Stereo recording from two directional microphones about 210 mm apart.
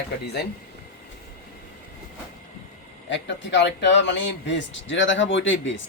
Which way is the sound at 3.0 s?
60° left (ahead or behind).